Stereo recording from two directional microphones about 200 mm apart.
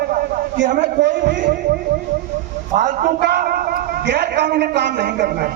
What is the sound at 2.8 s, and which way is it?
A man's voice, 40° right (ahead or behind).